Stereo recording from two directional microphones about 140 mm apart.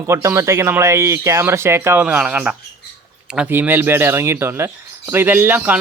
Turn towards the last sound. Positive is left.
turn(degrees=-15)  # may be behind; listen again after turning